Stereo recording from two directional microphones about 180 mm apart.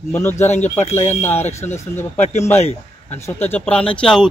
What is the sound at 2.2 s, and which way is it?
A man's voice, 40° left (ahead or behind).